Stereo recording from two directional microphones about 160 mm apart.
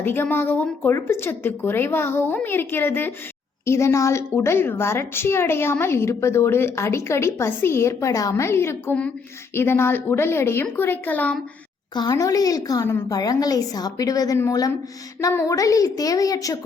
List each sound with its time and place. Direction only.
0.0 s a woman's voice: 15° left (ahead or behind)
11.9 s a woman's voice: 25° left (ahead or behind)